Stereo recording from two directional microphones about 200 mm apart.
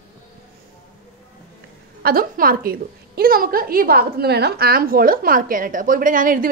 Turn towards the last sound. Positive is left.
turn(degrees=-45)  # may be behind; listen again after turning